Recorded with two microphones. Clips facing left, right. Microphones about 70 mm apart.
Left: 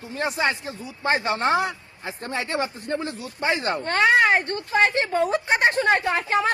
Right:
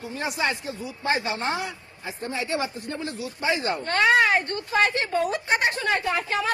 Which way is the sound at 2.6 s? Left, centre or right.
Left.